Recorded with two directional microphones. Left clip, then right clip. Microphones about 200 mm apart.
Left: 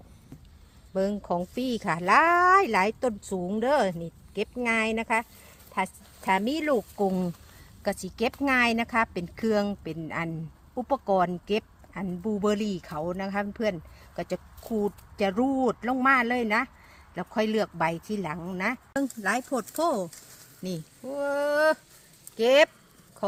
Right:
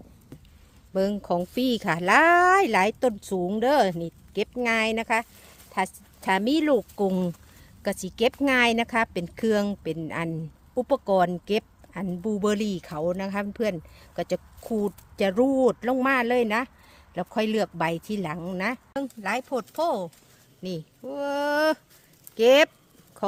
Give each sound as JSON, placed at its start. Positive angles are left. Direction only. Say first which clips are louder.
{"t": 0.9, "sound": "speech", "louder": "right 2 dB", "side_deg": -55}
{"t": 19.7, "sound": "speech", "louder": "right 1 dB", "side_deg": -30}
{"t": 20.7, "sound": "speech", "louder": "right 1 dB", "side_deg": -50}